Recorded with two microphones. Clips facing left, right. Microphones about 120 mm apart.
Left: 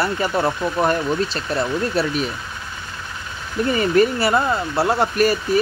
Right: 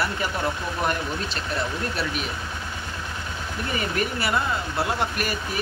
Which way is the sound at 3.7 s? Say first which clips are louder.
Left 10 dB; 35° left (ahead or behind).